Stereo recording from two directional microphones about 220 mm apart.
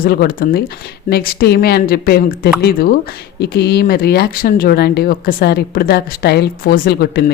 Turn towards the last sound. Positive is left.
turn(degrees=45)  # may be behind; listen again after turning